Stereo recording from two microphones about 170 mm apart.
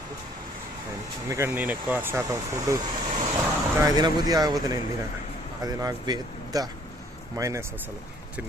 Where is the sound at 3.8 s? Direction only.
25° right (ahead or behind).